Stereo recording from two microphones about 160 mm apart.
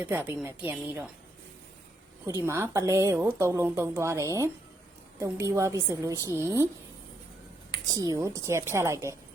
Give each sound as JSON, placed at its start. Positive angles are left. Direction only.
{"t": 0.0, "sound": "speech", "side_deg": -10}
{"t": 2.2, "sound": "speech", "side_deg": -15}
{"t": 7.9, "sound": "speech", "side_deg": -20}